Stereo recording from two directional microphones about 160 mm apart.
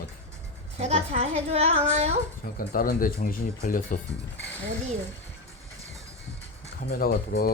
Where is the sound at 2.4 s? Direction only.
60° left (ahead or behind).